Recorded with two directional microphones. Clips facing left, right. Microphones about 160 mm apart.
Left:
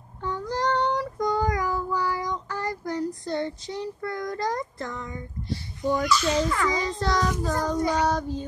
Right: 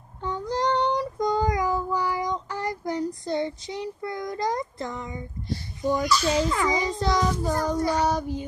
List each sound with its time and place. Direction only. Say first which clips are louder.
0.2 s child singing: right 1 dB; 20° right (ahead or behind)
5.8 s a child's voice: even; 10° right (ahead or behind)
6.0 s a child's voice: right 1 dB; 35° right (ahead or behind)
6.5 s a child's voice: right 1 dB; 15° right (ahead or behind)
7.7 s child singing: left 1 dB; 15° left (ahead or behind)
8.1 s a child's voice: even; 10° right (ahead or behind)